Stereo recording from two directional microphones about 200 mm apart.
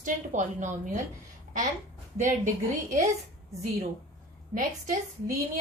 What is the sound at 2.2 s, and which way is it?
Speech, 40° right (ahead or behind).